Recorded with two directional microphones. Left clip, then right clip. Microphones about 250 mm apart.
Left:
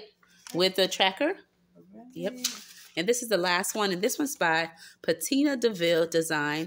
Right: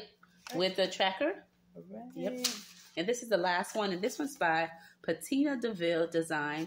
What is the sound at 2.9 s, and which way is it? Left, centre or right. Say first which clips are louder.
Speech: left 5 dB; left.